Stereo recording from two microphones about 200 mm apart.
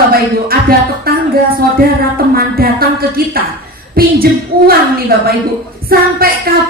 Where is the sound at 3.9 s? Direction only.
50° right (ahead or behind).